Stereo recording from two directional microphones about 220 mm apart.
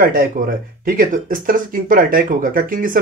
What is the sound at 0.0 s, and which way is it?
Speech, 40° right (ahead or behind).